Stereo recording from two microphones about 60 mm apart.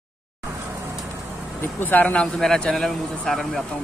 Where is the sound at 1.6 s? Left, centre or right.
Left.